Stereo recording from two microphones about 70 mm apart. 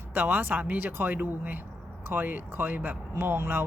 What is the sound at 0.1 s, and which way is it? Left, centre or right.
Speech, right.